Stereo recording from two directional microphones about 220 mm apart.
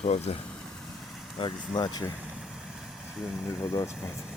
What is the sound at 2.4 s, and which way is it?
Vehicle, centre (ahead or behind).